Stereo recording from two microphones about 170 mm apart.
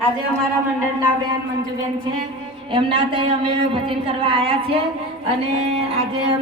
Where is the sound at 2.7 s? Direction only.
30° right (ahead or behind).